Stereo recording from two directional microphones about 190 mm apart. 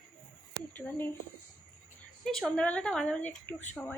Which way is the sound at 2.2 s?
5° left (ahead or behind).